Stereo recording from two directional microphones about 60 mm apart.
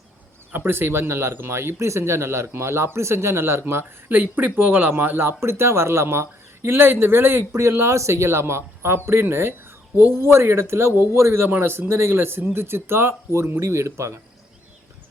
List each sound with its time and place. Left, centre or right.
0.5 s a man's voice: right
5.4 s a man's voice: right